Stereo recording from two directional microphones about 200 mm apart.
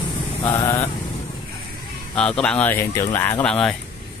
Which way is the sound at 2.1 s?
5° left (ahead or behind).